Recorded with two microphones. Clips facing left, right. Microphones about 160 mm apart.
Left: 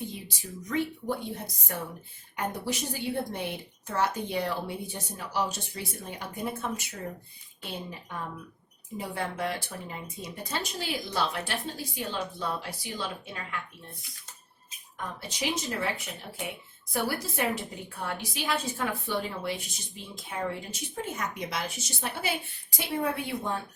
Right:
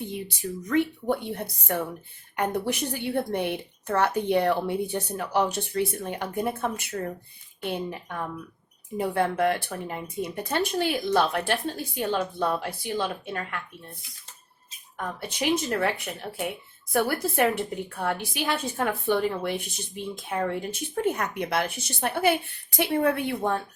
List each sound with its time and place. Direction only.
0.1 s a woman's voice: 60° right (ahead or behind)
15.3 s a woman's voice: 60° right (ahead or behind)